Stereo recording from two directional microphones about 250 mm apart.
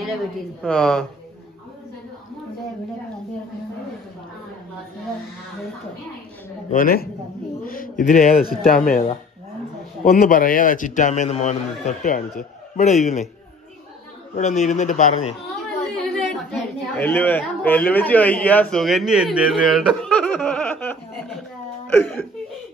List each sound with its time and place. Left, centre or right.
0.6 s speech: centre
6.7 s a man's voice: left
10.0 s a man's voice: left
14.3 s a man's voice: left
15.5 s a woman's voice: centre